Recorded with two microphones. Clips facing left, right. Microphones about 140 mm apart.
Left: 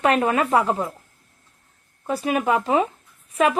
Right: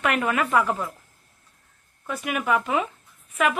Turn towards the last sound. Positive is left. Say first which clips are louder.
# left 4 dB
turn(degrees=30)  # may be behind; listen again after turning